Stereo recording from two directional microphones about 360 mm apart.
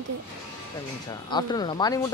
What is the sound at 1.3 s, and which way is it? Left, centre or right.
Speech, centre.